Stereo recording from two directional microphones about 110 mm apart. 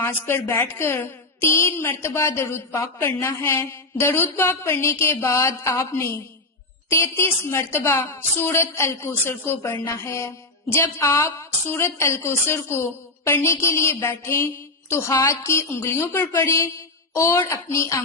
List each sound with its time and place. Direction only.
0.0 s a woman's voice: 20° left (ahead or behind)